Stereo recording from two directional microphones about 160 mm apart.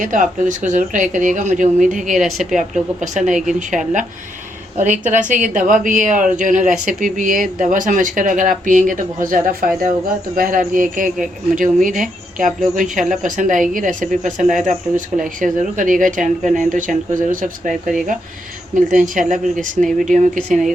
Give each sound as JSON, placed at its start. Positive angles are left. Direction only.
{"t": 0.0, "sound": "speech", "side_deg": -55}
{"t": 2.1, "sound": "a woman's voice", "side_deg": 0}
{"t": 3.0, "sound": "a woman's voice", "side_deg": -50}
{"t": 14.4, "sound": "a woman's voice", "side_deg": 0}
{"t": 14.9, "sound": "a woman's voice", "side_deg": -55}
{"t": 20.5, "sound": "a woman's voice", "side_deg": 0}